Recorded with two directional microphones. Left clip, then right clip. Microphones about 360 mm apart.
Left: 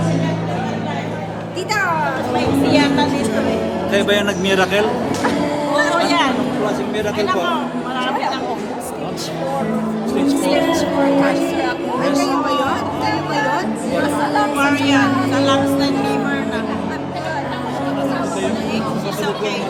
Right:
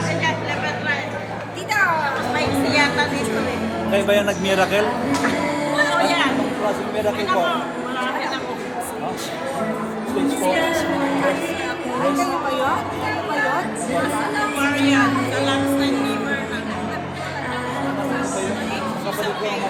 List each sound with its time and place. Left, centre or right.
2.7 s music: left
3.9 s speech: centre
14.6 s speech: centre